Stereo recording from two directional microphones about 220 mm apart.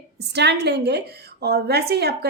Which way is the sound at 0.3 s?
50° right (ahead or behind).